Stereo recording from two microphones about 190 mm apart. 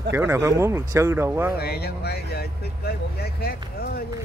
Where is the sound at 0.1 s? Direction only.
15° right (ahead or behind).